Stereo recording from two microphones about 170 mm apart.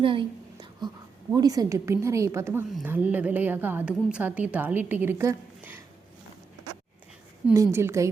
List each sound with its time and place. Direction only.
0.0 s a sound: 30° right (ahead or behind)
1.3 s a woman's voice: 20° right (ahead or behind)
7.5 s a woman's voice: 15° right (ahead or behind)